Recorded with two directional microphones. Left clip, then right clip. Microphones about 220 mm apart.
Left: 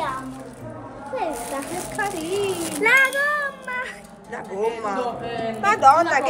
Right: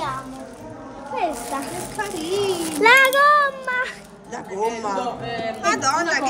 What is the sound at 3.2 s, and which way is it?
Child singing, 40° right (ahead or behind).